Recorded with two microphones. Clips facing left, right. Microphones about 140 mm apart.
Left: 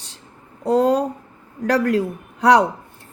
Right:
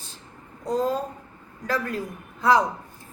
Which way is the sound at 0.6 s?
75° left (ahead or behind).